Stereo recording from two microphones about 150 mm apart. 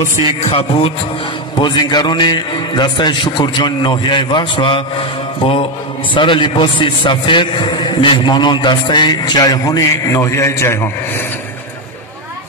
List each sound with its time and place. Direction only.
0.4 s a man's voice: 40° left (ahead or behind); by 11.2 s 15° left (ahead or behind)